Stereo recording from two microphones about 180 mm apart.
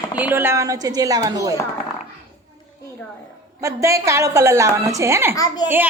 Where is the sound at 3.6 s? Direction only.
15° right (ahead or behind).